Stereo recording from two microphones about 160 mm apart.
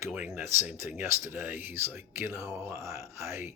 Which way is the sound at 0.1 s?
10° right (ahead or behind).